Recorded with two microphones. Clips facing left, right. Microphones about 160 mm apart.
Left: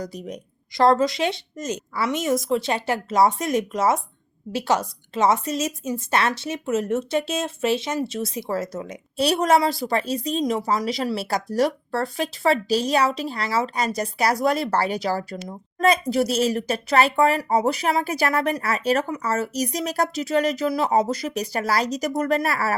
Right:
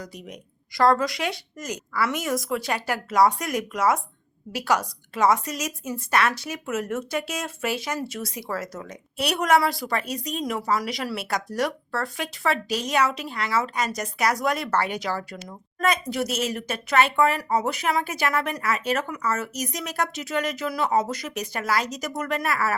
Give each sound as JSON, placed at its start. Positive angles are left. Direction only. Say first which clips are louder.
{"t": 0.0, "sound": "speech", "louder": "left 7 dB", "side_deg": 35}
{"t": 0.7, "sound": "speech", "louder": "left 3 dB", "side_deg": 25}